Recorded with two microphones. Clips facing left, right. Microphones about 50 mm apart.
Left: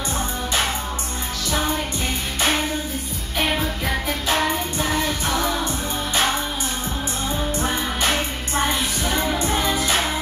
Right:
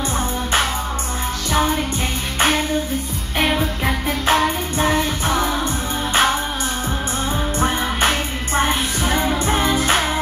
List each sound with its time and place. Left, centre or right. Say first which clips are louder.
3.3 s music: right 3 dB; right
9.0 s music: right 4 dB; right